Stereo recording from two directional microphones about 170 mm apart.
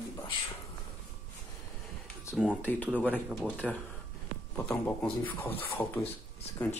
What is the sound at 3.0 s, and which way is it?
Speech, centre (ahead or behind).